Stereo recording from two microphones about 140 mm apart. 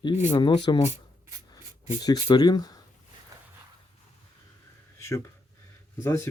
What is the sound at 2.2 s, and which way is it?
Speech, 30° left (ahead or behind).